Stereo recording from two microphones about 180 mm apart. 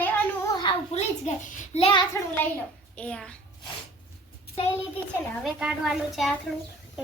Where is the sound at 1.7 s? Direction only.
35° left (ahead or behind).